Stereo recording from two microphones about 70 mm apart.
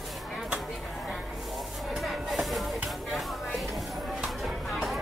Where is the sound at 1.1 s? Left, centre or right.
Centre.